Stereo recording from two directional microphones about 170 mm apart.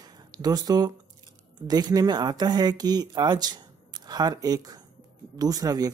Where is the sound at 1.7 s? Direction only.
25° right (ahead or behind).